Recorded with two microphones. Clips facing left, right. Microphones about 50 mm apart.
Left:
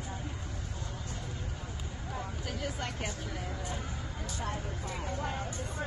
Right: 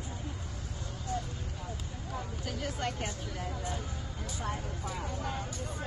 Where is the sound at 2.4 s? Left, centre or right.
Centre.